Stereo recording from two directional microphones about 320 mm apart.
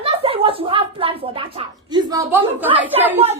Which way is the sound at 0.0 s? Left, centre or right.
Centre.